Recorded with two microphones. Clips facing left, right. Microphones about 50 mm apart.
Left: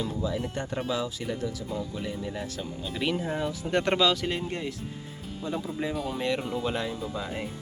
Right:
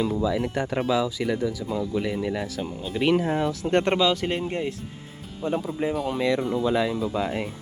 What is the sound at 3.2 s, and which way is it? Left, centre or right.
Speech, right.